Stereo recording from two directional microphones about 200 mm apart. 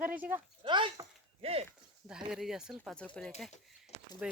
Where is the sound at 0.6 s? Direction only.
25° right (ahead or behind).